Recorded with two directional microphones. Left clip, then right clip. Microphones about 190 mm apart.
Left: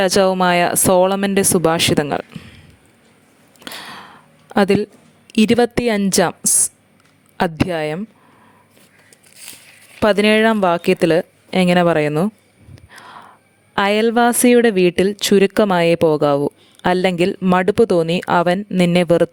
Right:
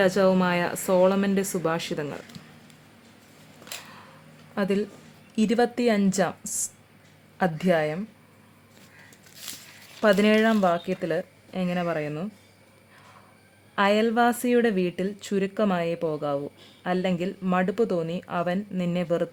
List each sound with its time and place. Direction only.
0.0 s speech: 55° left (ahead or behind)
3.6 s a sound: 50° left (ahead or behind)
4.5 s speech: 55° left (ahead or behind)
10.0 s speech: 50° left (ahead or behind)
13.7 s speech: 50° left (ahead or behind)